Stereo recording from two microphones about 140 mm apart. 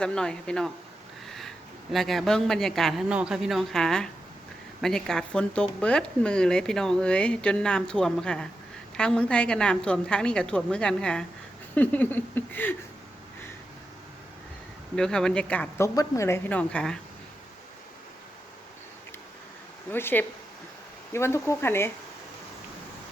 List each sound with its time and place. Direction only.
0.0 s a woman's voice: 5° left (ahead or behind)
11.7 s a sound: 10° left (ahead or behind)
14.9 s a woman's voice: 5° left (ahead or behind)
16.0 s a woman's voice: 20° left (ahead or behind)
19.9 s a woman's voice: 15° left (ahead or behind)